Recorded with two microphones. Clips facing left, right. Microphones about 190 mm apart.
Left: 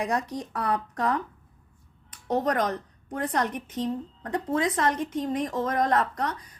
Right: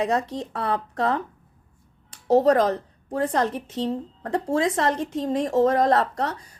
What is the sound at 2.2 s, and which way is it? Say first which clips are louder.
A woman's voice: right 8 dB; 30° right (ahead or behind).